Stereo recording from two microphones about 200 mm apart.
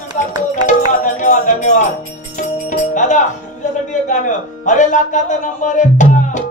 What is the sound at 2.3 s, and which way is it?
Music, 40° left (ahead or behind).